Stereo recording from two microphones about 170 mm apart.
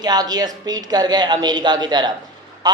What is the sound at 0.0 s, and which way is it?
Speech, 25° right (ahead or behind).